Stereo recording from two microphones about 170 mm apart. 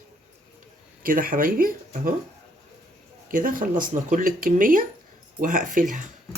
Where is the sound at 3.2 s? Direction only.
55° right (ahead or behind).